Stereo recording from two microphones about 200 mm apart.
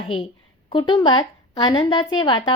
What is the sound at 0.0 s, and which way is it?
A woman's voice, 25° left (ahead or behind).